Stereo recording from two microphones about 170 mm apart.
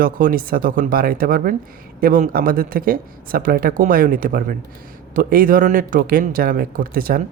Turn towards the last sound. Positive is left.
turn(degrees=-55)  # may be behind; listen again after turning